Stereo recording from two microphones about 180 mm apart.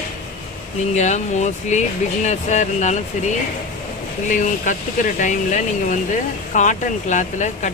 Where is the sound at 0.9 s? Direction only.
40° left (ahead or behind).